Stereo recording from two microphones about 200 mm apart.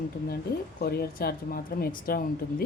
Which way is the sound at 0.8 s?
50° left (ahead or behind).